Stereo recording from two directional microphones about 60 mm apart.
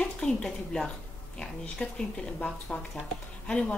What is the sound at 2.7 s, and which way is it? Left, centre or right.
Speech, left.